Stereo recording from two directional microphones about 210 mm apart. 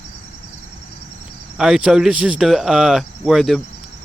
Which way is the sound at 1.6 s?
5° right (ahead or behind).